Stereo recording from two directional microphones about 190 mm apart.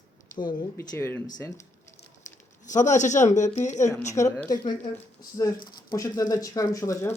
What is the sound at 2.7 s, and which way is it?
Speech, 40° left (ahead or behind).